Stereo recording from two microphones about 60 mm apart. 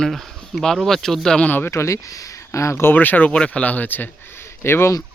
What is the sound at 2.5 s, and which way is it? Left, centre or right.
Speech, left.